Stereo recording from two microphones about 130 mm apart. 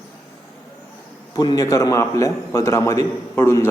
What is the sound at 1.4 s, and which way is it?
A man's voice, 30° left (ahead or behind).